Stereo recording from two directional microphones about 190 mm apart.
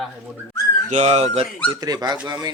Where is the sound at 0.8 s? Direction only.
35° right (ahead or behind).